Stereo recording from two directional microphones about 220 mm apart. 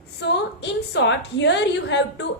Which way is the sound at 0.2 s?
50° left (ahead or behind).